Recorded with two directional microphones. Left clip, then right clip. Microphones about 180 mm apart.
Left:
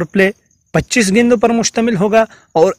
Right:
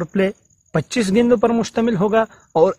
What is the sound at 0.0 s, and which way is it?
Speech, 35° left (ahead or behind).